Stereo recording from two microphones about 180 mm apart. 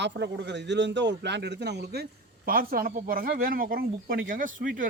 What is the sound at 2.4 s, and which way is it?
Speech, 55° right (ahead or behind).